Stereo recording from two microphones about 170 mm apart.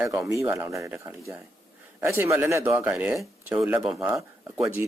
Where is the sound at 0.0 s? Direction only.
15° right (ahead or behind); by 4.1 s centre (ahead or behind).